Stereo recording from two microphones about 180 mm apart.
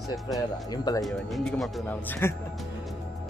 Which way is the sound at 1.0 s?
Centre (ahead or behind).